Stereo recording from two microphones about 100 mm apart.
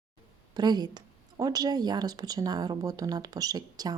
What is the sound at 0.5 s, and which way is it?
Speech, 45° right (ahead or behind).